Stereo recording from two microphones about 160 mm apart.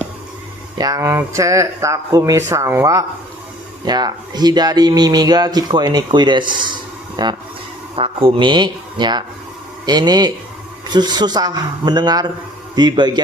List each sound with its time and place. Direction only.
0.8 s speech: 20° right (ahead or behind)
7.9 s speech: 35° right (ahead or behind)